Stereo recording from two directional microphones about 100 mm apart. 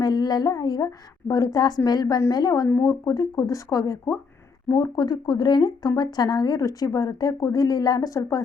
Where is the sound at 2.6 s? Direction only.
25° left (ahead or behind).